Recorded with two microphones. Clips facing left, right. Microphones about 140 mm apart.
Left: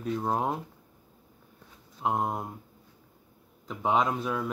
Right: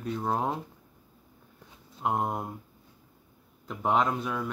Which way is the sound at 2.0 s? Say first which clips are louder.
Even; centre (ahead or behind).